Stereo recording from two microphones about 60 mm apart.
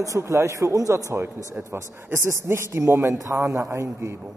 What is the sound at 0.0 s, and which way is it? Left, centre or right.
Speech, right.